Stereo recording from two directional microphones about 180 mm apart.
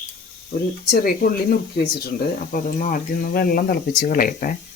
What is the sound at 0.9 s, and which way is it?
Speech, 55° left (ahead or behind).